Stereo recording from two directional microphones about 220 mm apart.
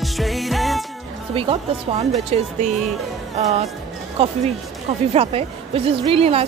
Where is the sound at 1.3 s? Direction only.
25° right (ahead or behind).